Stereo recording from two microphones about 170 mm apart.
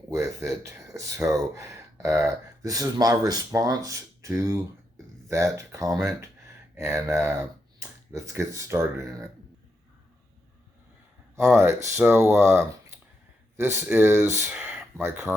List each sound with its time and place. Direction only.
0.1 s speech: 20° right (ahead or behind)
11.3 s speech: 15° right (ahead or behind)